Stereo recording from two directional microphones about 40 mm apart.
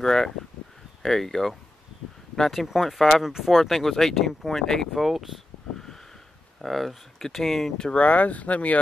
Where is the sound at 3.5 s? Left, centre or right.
Centre.